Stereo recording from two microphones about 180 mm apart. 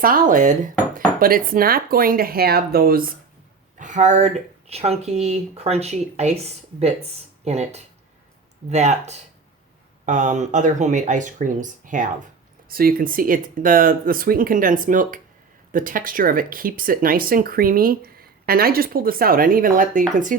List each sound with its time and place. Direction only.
0.0 s speech: 50° right (ahead or behind)
3.8 s speech: 45° right (ahead or behind)